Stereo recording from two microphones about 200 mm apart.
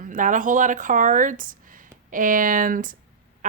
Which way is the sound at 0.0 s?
40° right (ahead or behind).